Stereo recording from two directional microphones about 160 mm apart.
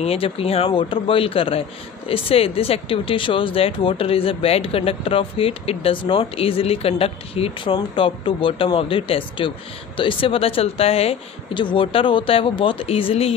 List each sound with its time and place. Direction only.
0.0 s speech: 40° left (ahead or behind)